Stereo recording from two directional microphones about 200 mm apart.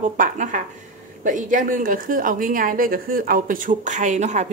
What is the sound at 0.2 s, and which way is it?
A woman's voice, 40° right (ahead or behind).